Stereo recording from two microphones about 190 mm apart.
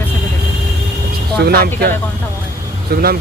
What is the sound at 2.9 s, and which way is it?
Speech, 55° right (ahead or behind).